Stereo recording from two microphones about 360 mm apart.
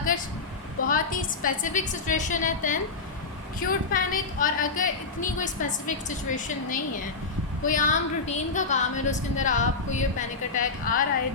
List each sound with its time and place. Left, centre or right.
0.9 s a woman's voice: left